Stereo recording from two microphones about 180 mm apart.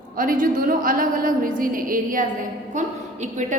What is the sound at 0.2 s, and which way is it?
A woman's voice, 50° right (ahead or behind).